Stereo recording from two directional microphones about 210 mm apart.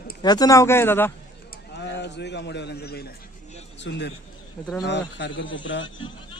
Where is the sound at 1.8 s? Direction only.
55° left (ahead or behind).